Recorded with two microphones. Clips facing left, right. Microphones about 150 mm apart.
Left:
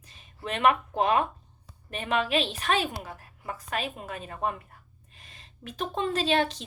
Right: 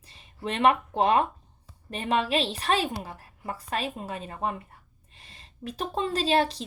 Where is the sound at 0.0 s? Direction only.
35° right (ahead or behind).